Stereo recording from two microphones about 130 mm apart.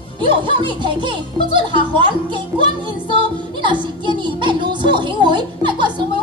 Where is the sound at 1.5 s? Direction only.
40° right (ahead or behind).